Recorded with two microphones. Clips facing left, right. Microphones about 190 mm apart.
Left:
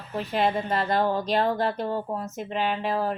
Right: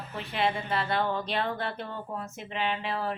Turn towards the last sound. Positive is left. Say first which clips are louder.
# left 5 dB
turn(degrees=40)  # may be behind; listen again after turning